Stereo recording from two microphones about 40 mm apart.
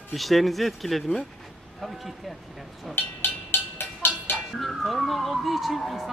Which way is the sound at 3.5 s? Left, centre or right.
Left.